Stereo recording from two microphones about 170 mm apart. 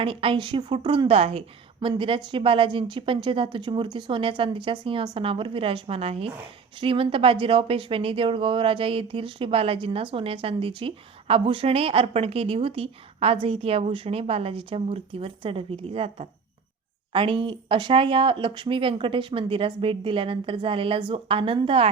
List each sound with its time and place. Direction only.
0.0 s speech: 30° right (ahead or behind)